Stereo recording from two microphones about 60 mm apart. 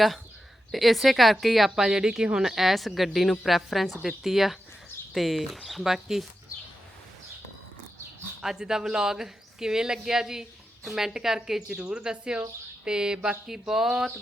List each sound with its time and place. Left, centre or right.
0.7 s a woman's voice: centre
8.4 s speech: centre